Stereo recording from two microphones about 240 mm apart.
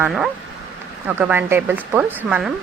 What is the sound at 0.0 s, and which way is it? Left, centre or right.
Speech, centre.